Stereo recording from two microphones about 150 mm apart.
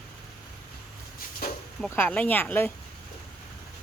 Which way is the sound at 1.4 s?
85° left.